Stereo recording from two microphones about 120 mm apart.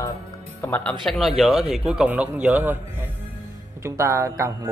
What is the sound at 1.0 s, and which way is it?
A man's voice, centre (ahead or behind).